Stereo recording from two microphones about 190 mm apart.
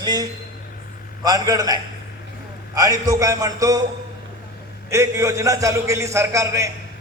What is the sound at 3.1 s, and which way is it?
Speech, 20° right (ahead or behind).